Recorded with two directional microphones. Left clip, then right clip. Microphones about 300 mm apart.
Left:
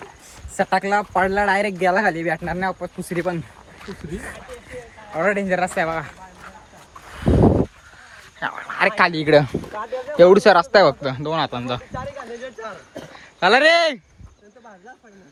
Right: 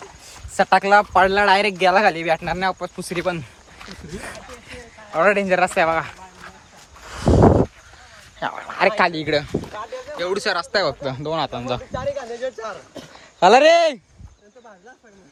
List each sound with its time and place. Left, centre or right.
0.5 s speech: centre
5.1 s speech: centre
8.4 s cricket: centre
9.0 s speech: centre
11.9 s a sound: right
13.0 s speech: centre